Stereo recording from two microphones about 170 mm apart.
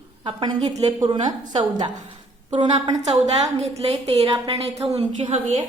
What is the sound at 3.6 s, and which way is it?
A woman's voice, 40° right (ahead or behind).